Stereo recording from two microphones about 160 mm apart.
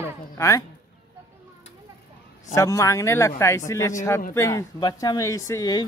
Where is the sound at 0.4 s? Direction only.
20° left (ahead or behind).